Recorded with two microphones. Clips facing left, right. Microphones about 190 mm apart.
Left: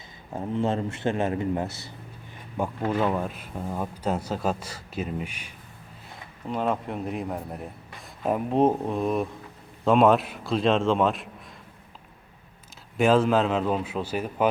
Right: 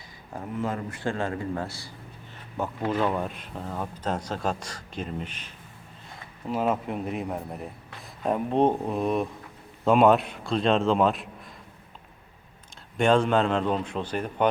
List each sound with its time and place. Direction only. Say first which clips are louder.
0.3 s speech: left 4 dB; 25° left (ahead or behind)
2.6 s speech: left 1 dB; 10° left (ahead or behind)
6.5 s a man's voice: right 1 dB; 5° right (ahead or behind)
13.0 s a man's voice: left 1 dB; 5° left (ahead or behind)